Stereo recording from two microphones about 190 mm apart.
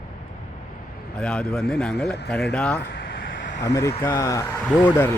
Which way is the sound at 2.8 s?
60° left (ahead or behind).